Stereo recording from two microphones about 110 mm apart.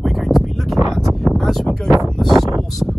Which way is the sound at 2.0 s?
5° left (ahead or behind).